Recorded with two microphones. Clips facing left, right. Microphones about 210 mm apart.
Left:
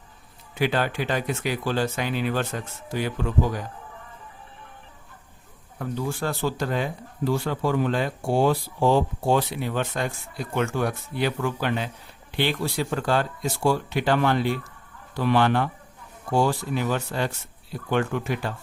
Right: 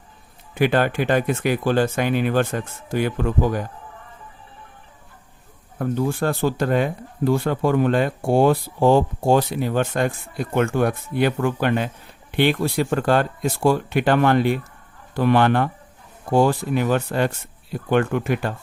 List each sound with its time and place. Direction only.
0.5 s speech: 55° right (ahead or behind)
5.8 s speech: 55° right (ahead or behind)